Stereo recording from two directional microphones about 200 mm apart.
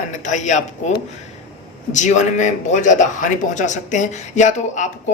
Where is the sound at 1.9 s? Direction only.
35° left (ahead or behind).